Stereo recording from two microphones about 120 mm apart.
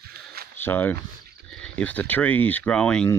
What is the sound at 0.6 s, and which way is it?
Speech, 15° left (ahead or behind).